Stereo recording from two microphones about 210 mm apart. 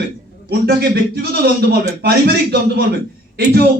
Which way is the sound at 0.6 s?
50° right (ahead or behind).